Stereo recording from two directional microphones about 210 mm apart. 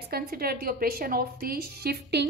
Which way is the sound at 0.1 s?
45° right (ahead or behind).